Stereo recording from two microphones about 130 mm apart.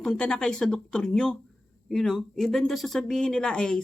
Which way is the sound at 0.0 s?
5° left (ahead or behind).